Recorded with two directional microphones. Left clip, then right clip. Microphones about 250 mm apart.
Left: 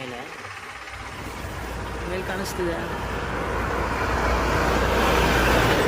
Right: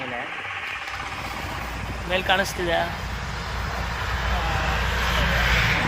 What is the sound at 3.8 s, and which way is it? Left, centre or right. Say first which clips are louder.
Vehicle: left 4 dB; left.